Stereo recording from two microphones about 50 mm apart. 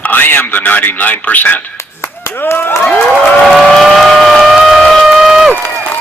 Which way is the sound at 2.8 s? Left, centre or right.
Left.